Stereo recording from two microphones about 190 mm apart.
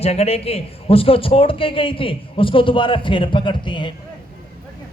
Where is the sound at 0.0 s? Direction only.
35° left (ahead or behind).